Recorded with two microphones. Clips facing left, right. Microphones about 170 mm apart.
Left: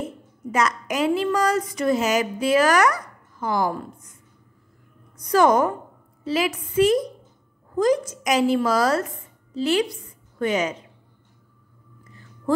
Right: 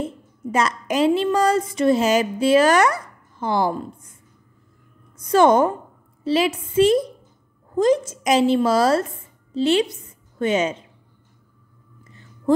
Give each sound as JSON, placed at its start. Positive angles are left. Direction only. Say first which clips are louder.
{"t": 0.0, "sound": "a woman's voice", "louder": "right 3 dB", "side_deg": -30}
{"t": 5.1, "sound": "a woman's voice", "louder": "right 3 dB", "side_deg": -25}
{"t": 12.0, "sound": "a sound", "louder": "right 1 dB", "side_deg": -25}